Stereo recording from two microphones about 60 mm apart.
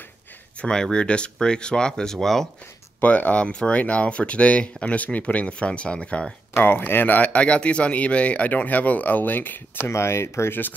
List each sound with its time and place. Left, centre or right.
0.6 s speech: centre
3.0 s speech: left
6.5 s speech: left
9.8 s speech: left